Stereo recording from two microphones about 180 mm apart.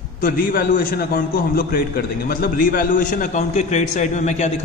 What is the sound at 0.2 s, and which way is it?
A man's voice, 55° left (ahead or behind).